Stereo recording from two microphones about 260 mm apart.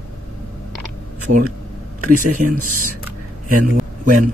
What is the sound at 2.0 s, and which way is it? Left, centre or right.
Speech, right.